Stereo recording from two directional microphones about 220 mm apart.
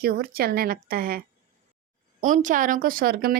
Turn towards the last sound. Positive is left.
turn(degrees=-45)  # may be behind; listen again after turning